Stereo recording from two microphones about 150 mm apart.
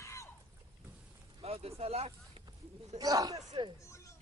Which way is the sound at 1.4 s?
40° right (ahead or behind).